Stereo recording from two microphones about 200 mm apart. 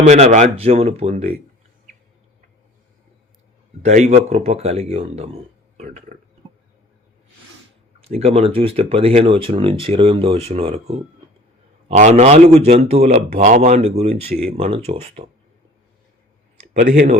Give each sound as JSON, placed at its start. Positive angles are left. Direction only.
{"t": 0.0, "sound": "speech", "side_deg": -35}
{"t": 3.8, "sound": "speech", "side_deg": -35}
{"t": 8.0, "sound": "speech", "side_deg": -30}
{"t": 13.3, "sound": "speech", "side_deg": -45}